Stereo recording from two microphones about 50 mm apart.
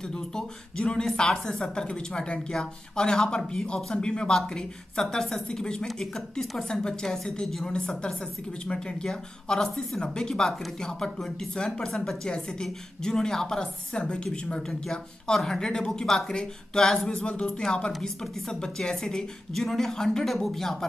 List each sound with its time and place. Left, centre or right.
0.1 s speech: centre